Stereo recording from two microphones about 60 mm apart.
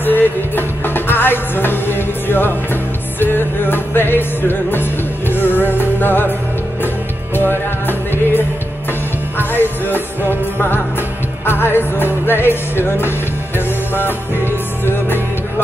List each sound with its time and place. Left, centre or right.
0.0 s music: left
7.3 s music: left
11.4 s music: left